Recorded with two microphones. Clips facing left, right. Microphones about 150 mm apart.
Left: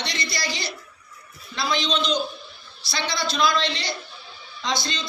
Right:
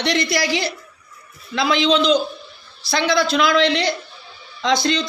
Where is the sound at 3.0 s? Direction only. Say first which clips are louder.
Right 6 dB; 70° right (ahead or behind).